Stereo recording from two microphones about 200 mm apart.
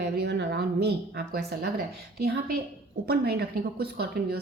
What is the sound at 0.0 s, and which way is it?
A woman's voice, 55° right (ahead or behind).